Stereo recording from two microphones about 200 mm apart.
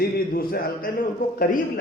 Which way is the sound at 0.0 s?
45° left (ahead or behind).